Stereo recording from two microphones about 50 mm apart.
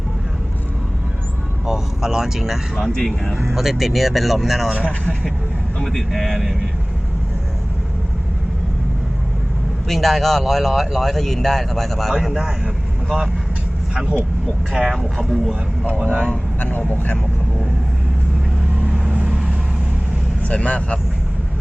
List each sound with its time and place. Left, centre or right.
1.6 s speech: centre
2.8 s speech: centre
3.5 s speech: centre
5.8 s speech: centre
9.9 s speech: centre
14.7 s speech: centre
14.9 s speech: centre
16.6 s speech: left
18.9 s vehicle: centre
20.5 s speech: left